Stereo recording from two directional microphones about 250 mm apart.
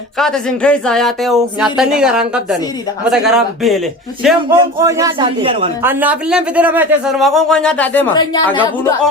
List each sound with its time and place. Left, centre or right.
0.2 s speech: centre
4.6 s speech: centre
5.8 s speech: centre